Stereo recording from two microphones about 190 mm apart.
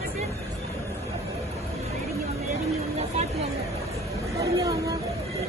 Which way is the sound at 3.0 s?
35° right (ahead or behind).